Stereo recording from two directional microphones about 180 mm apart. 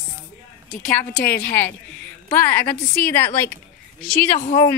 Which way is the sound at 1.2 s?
10° left (ahead or behind).